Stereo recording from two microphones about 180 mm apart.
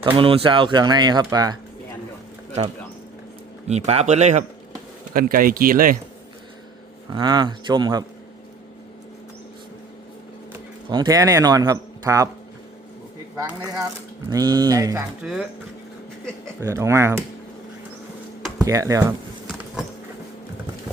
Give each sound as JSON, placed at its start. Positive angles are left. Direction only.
{"t": 0.0, "sound": "speech", "side_deg": -30}
{"t": 3.7, "sound": "speech", "side_deg": -35}
{"t": 5.1, "sound": "speech", "side_deg": -50}
{"t": 7.1, "sound": "speech", "side_deg": -25}
{"t": 10.8, "sound": "speech", "side_deg": -25}
{"t": 13.5, "sound": "speech", "side_deg": -10}
{"t": 15.2, "sound": "speech", "side_deg": -5}
{"t": 16.6, "sound": "speech", "side_deg": -15}
{"t": 18.6, "sound": "speech", "side_deg": -20}